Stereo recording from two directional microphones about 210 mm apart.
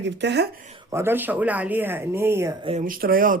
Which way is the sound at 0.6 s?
30° right (ahead or behind).